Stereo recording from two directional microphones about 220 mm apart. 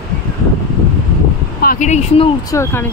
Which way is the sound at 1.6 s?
35° left (ahead or behind).